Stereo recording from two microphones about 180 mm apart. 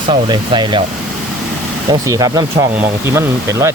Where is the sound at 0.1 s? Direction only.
25° right (ahead or behind).